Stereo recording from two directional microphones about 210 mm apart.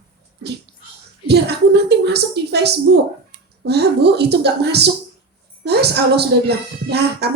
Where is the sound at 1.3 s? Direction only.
50° right (ahead or behind).